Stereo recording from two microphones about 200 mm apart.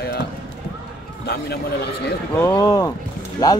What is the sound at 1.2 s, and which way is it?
Speech, 50° left (ahead or behind).